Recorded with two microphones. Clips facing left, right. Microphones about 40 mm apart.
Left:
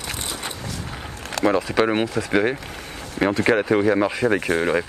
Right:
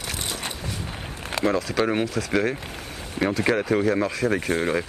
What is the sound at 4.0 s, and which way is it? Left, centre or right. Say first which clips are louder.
Speech: left 4 dB; left.